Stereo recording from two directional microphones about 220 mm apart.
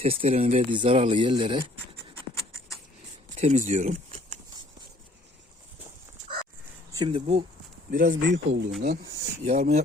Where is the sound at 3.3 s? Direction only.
30° right (ahead or behind).